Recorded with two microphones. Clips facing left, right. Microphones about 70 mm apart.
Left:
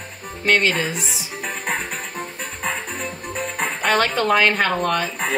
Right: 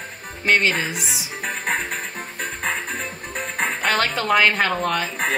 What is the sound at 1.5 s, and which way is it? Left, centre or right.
Frog, right.